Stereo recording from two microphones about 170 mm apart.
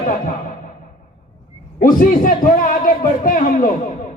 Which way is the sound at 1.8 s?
55° left (ahead or behind).